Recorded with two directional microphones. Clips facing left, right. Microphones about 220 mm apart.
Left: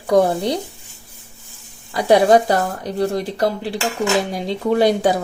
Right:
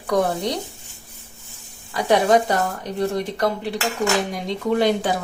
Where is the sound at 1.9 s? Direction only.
35° left (ahead or behind).